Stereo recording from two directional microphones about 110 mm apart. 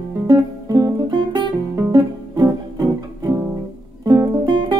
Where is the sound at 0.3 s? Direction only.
35° right (ahead or behind).